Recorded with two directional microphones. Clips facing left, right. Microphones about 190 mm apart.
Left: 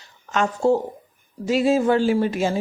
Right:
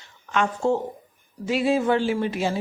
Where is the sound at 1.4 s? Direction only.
40° left (ahead or behind).